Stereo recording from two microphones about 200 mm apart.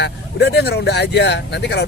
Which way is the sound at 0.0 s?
55° left (ahead or behind).